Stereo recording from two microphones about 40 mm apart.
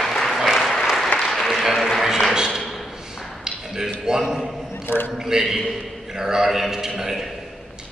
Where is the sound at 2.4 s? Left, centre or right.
Centre.